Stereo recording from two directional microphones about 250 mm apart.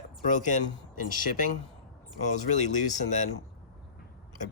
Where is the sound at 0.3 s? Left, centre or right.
Left.